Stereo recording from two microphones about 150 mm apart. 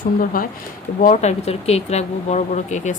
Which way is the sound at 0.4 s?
70° left (ahead or behind).